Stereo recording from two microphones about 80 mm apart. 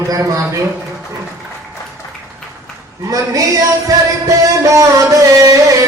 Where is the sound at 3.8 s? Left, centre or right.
Right.